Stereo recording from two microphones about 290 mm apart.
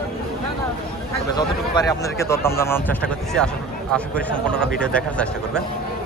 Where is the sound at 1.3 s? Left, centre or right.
Centre.